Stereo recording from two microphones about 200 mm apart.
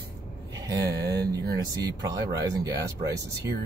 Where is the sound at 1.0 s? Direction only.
55° right (ahead or behind).